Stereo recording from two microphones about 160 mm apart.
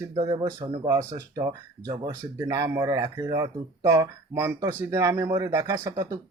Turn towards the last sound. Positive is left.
turn(degrees=-15)  # may be behind; listen again after turning